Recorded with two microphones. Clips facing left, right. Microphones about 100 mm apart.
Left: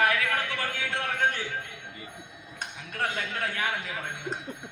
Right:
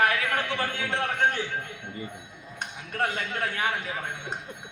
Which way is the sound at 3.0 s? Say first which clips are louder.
Right 2 dB; 35° right (ahead or behind).